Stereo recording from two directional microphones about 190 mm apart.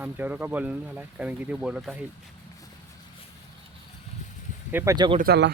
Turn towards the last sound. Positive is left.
turn(degrees=-55)  # may be behind; listen again after turning